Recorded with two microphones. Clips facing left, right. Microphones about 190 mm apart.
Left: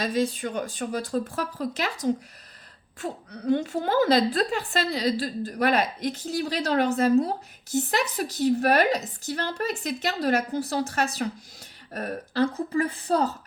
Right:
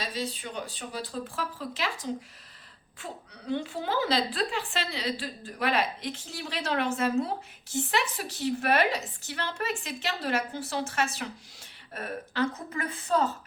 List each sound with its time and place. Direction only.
0.0 s a woman's voice: 50° left (ahead or behind)